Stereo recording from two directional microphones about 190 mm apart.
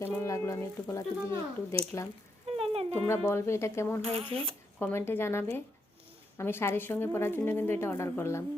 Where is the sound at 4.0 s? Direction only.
30° right (ahead or behind).